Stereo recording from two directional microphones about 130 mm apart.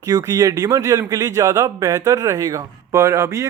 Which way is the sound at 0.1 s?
25° right (ahead or behind).